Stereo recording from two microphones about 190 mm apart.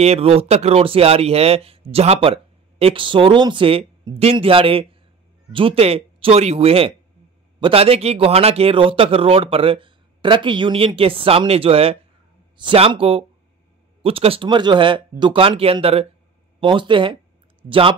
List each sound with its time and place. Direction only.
0.0 s speech: 30° right (ahead or behind)